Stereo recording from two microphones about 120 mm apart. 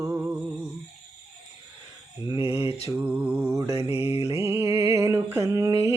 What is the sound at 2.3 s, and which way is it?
Mantra, 20° right (ahead or behind).